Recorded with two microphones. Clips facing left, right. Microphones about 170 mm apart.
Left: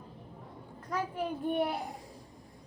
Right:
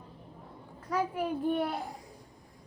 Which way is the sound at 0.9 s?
10° right (ahead or behind).